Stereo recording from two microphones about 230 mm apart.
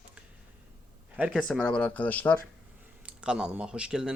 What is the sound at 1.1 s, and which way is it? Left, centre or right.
Speech, centre.